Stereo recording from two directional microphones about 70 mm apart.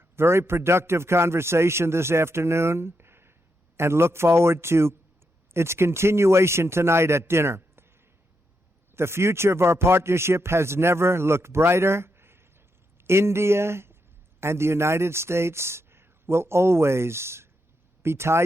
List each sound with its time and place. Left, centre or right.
0.2 s a man's voice: right
9.0 s a man's voice: right